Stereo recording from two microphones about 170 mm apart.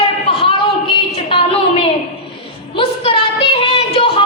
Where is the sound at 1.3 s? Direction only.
30° left (ahead or behind).